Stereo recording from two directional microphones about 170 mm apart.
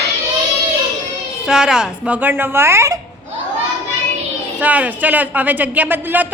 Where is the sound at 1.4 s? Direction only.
5° right (ahead or behind).